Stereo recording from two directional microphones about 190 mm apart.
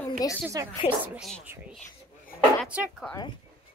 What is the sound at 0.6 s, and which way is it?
Speech, 20° right (ahead or behind).